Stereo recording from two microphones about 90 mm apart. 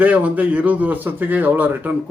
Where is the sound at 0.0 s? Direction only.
15° right (ahead or behind).